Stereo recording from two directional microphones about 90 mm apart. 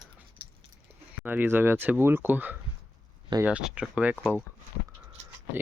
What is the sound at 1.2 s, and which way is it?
Speech, 20° right (ahead or behind).